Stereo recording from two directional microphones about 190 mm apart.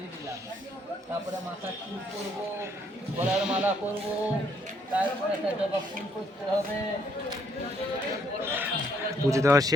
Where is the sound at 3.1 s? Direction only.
5° right (ahead or behind).